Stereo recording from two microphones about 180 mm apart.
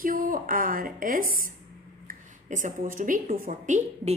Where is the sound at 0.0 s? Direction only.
50° right (ahead or behind).